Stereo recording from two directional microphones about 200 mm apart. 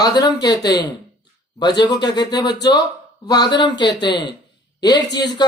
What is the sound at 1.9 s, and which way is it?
A man's voice, 20° left (ahead or behind).